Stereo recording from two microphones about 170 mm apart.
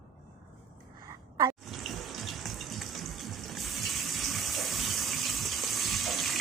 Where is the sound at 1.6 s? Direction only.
Centre (ahead or behind).